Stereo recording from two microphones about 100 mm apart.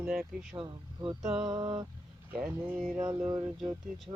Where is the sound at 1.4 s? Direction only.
45° right (ahead or behind).